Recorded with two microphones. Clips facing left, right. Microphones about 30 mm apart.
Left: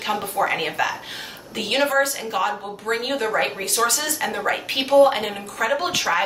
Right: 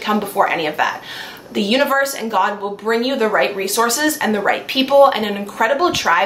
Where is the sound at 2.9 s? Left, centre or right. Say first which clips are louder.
Right 6 dB; right.